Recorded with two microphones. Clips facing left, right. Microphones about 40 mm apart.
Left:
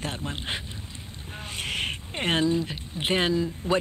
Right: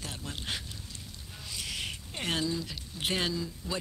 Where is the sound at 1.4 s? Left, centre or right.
Left.